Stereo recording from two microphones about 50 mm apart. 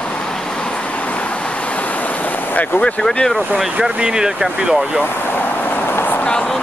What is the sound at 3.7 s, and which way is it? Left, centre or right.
Speech, centre.